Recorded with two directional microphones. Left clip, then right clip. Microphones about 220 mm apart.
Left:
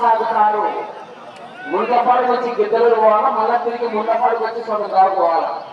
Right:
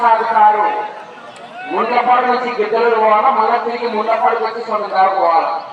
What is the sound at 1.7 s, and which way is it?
A man's voice, 25° right (ahead or behind).